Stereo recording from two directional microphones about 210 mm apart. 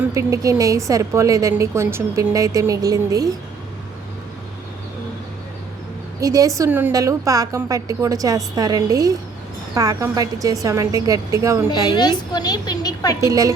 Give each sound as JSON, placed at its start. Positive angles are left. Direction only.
{"t": 0.0, "sound": "a woman's voice", "side_deg": -15}
{"t": 6.1, "sound": "a woman's voice", "side_deg": -15}
{"t": 11.7, "sound": "a woman's voice", "side_deg": 20}
{"t": 13.2, "sound": "a woman's voice", "side_deg": -15}